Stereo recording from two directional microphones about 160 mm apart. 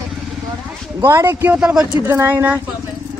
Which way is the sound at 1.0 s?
15° right (ahead or behind).